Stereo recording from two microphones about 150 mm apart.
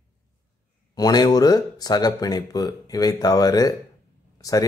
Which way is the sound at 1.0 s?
25° left (ahead or behind).